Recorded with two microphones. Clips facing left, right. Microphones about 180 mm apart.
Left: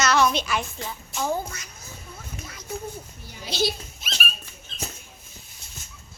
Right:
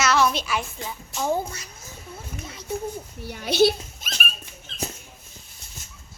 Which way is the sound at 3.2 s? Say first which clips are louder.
Right 8 dB; 65° right (ahead or behind).